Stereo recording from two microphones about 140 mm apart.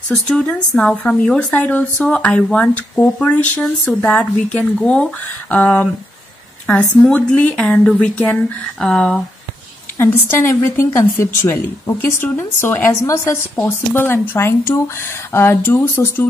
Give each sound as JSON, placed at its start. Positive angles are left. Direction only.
{"t": 0.1, "sound": "a woman's voice", "side_deg": 5}
{"t": 9.9, "sound": "a woman's voice", "side_deg": 15}